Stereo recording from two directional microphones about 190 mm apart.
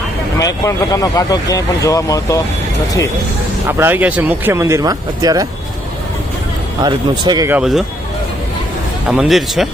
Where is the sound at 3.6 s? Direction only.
10° right (ahead or behind).